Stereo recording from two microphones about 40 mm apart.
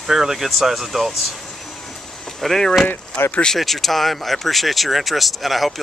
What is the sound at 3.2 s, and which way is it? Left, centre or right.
Speech, left.